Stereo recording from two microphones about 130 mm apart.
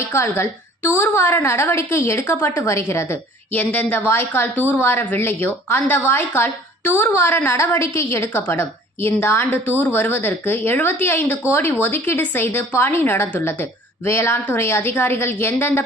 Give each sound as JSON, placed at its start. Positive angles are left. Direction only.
{"t": 0.1, "sound": "a woman's voice", "side_deg": 20}